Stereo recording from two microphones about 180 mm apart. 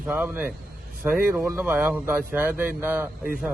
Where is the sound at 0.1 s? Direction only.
5° right (ahead or behind).